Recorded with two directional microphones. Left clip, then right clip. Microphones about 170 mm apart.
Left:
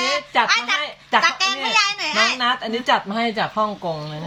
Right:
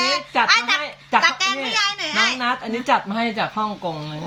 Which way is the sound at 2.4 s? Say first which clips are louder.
Left 2 dB; 35° left (ahead or behind).